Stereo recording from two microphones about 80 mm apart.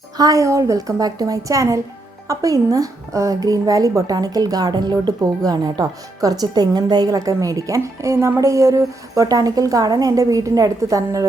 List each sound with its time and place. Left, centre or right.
0.2 s a woman's voice: right